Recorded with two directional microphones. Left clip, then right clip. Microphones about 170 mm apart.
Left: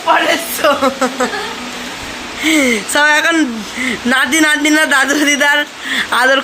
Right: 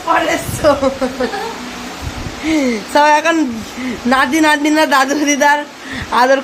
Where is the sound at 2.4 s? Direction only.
Centre (ahead or behind).